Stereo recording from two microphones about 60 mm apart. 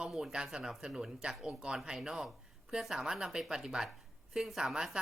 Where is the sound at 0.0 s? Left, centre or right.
Centre.